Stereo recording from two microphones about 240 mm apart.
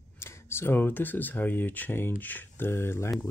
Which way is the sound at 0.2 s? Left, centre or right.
Centre.